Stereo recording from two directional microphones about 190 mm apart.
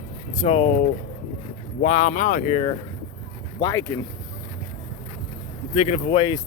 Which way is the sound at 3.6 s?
15° left (ahead or behind).